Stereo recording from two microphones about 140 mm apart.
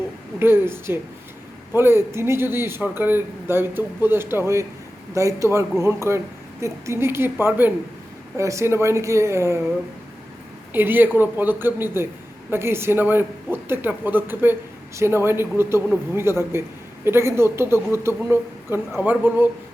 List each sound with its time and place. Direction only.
0.3 s a man's voice: 15° right (ahead or behind)
10.7 s a man's voice: 15° right (ahead or behind)